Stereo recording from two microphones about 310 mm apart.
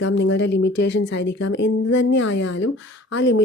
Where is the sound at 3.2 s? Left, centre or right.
Left.